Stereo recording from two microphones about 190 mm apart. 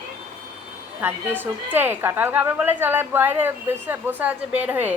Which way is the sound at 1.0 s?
10° right (ahead or behind).